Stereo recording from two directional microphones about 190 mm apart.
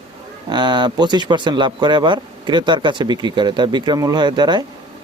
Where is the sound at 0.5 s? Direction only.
25° right (ahead or behind).